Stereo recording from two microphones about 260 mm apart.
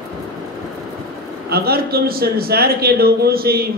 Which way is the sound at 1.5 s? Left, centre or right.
Right.